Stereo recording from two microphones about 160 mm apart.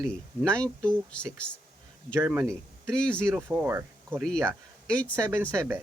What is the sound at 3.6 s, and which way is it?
Speech, 15° right (ahead or behind).